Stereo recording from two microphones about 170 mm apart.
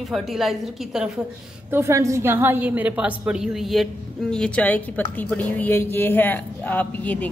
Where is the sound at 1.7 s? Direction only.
15° right (ahead or behind); by 7.3 s 10° left (ahead or behind).